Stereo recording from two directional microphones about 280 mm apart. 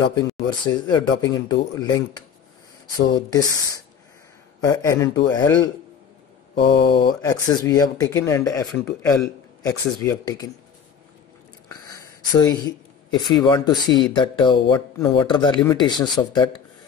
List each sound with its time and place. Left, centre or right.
0.1 s speech: centre
6.9 s speech: centre
11.7 s a sound: centre
13.1 s speech: centre